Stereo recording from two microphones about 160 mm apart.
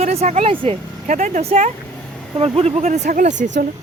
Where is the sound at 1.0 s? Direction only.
50° right (ahead or behind).